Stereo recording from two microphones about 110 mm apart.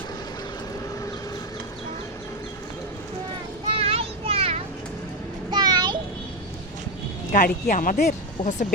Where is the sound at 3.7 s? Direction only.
60° right (ahead or behind).